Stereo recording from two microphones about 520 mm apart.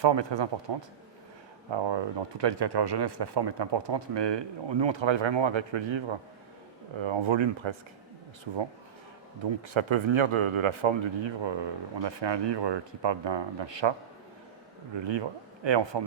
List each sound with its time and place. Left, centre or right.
0.0 s speech: right
9.7 s speech: right
14.9 s speech: right